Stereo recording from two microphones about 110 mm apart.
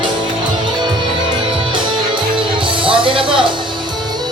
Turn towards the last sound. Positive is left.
turn(degrees=-50)  # may be behind; listen again after turning